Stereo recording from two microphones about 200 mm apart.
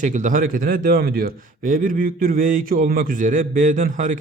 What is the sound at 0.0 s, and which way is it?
A man's voice, 40° right (ahead or behind).